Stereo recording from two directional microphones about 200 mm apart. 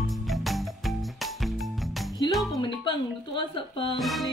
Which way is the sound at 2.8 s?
25° left (ahead or behind).